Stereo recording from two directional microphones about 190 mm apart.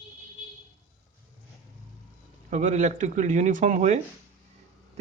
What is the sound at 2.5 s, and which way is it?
Speech, 40° right (ahead or behind).